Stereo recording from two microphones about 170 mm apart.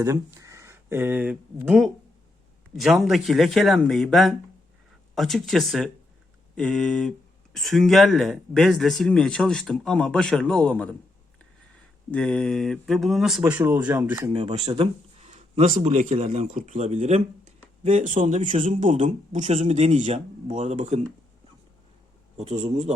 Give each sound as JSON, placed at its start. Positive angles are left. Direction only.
{"t": 0.0, "sound": "speech", "side_deg": -15}
{"t": 12.1, "sound": "speech", "side_deg": 5}
{"t": 14.3, "sound": "speech", "side_deg": -35}
{"t": 22.4, "sound": "speech", "side_deg": -40}